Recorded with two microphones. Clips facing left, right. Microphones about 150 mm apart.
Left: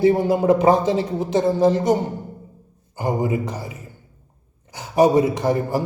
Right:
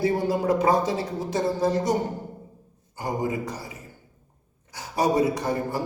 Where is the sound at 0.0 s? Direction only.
25° left (ahead or behind).